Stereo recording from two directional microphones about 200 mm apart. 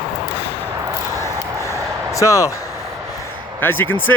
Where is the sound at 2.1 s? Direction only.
15° left (ahead or behind).